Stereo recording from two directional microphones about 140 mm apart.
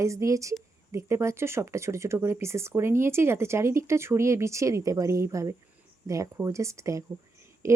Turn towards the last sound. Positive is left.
turn(degrees=-20)  # may be behind; listen again after turning